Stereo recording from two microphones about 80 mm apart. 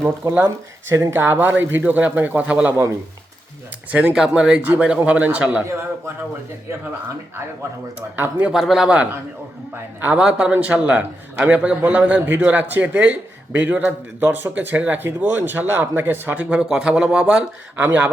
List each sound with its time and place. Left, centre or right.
0.0 s a man's voice: right; by 2.7 s centre
4.1 s speech: centre
8.1 s a man's voice: right
8.4 s a man's voice: centre
10.0 s a man's voice: right
10.2 s a man's voice: centre